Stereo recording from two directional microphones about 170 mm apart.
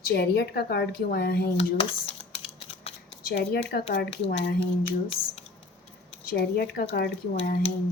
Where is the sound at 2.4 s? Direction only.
35° left (ahead or behind).